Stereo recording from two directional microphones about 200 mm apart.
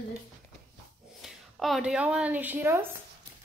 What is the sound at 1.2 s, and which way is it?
A woman's voice, centre (ahead or behind).